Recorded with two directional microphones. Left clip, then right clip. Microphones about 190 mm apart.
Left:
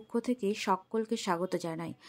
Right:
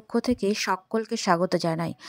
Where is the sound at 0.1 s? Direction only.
35° right (ahead or behind).